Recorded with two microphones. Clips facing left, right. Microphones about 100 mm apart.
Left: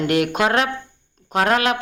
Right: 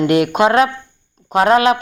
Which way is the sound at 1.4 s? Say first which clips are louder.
Right 6 dB; 25° right (ahead or behind).